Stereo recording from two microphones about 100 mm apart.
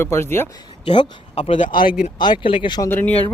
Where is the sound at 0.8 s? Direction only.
50° left (ahead or behind).